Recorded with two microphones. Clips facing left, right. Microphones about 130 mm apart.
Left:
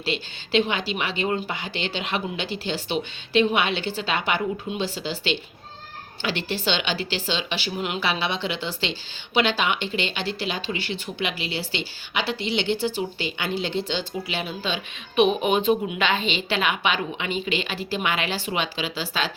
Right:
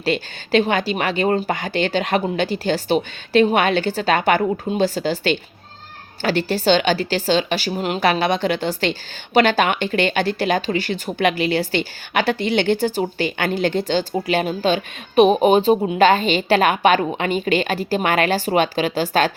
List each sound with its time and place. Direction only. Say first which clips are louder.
0.0 s a woman's voice: right 7 dB; 45° right (ahead or behind)